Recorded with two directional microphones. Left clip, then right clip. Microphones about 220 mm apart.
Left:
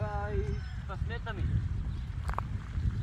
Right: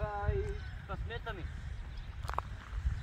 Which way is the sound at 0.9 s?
5° right (ahead or behind).